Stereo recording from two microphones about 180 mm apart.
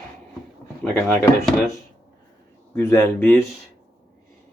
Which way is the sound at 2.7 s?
15° left (ahead or behind).